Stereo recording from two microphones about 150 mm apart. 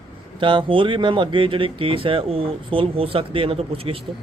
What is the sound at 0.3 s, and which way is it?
Speech, 35° right (ahead or behind).